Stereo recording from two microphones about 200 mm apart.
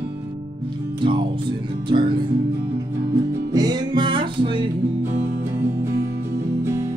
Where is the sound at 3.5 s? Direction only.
20° right (ahead or behind).